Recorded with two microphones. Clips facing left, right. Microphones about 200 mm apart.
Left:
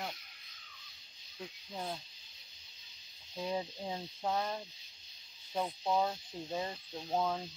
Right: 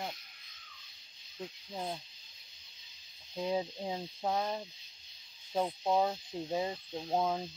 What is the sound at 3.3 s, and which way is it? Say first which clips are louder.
Speech: right 3 dB; 15° right (ahead or behind).